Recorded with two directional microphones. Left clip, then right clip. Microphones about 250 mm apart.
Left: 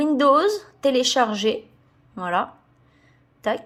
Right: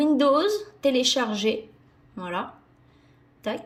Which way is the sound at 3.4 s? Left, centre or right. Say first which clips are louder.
Left 6 dB; centre.